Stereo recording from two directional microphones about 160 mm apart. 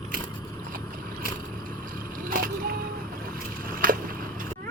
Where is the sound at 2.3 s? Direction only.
60° right (ahead or behind).